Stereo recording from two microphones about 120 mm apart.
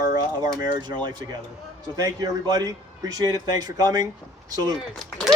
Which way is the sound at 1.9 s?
35° right (ahead or behind).